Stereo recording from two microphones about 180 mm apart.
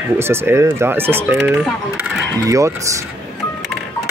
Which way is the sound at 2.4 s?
15° right (ahead or behind).